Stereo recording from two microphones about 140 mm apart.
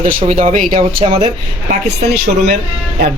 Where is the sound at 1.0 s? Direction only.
40° right (ahead or behind).